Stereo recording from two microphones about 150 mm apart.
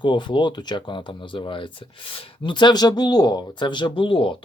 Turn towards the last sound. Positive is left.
turn(degrees=35)  # may be behind; listen again after turning